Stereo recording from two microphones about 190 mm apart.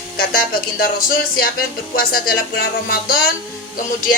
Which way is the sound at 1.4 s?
50° left (ahead or behind).